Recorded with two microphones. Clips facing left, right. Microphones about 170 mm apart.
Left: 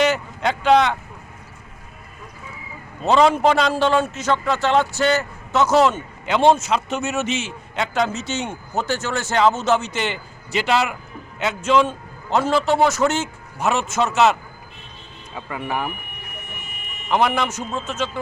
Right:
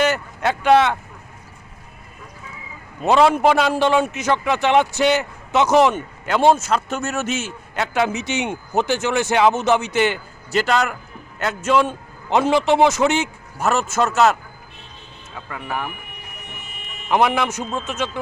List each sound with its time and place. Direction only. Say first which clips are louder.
0.0 s vehicle: even; 5° right (ahead or behind)
3.0 s a man's voice: right 1 dB; 10° right (ahead or behind)
6.3 s a man's voice: even; 5° right (ahead or behind)
13.6 s a man's voice: right 1 dB; centre (ahead or behind)
15.4 s speech: left 2 dB; 15° left (ahead or behind)
17.1 s a man's voice: right 1 dB; 5° right (ahead or behind)